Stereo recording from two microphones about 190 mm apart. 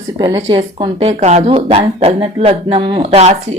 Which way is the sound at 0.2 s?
30° right (ahead or behind).